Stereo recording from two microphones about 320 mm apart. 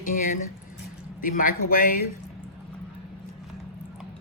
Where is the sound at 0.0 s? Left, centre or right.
Left.